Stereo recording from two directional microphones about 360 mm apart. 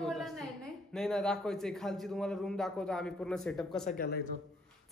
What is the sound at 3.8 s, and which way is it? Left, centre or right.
Speech, left.